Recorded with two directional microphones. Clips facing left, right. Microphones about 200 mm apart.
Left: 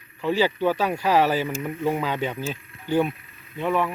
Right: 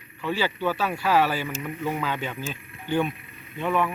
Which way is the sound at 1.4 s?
25° left (ahead or behind).